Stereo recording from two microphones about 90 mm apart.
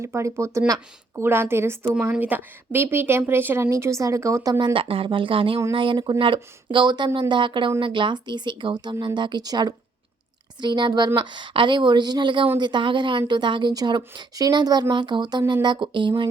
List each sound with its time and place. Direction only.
0.0 s speech: 30° right (ahead or behind)
2.1 s speech: 15° right (ahead or behind); by 4.6 s 35° right (ahead or behind)
4.6 s speech: 80° right; by 9.7 s 45° right (ahead or behind)
10.6 s speech: 55° right (ahead or behind)